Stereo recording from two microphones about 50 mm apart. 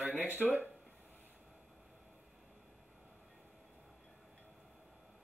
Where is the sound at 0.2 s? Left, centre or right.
Right.